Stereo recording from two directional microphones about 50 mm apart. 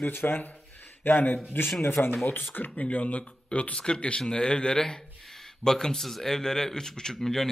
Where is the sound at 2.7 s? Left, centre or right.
Left.